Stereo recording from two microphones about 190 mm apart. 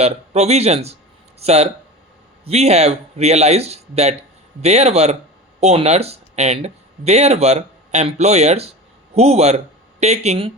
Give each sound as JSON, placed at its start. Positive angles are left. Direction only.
{"t": 0.0, "sound": "speech", "side_deg": -35}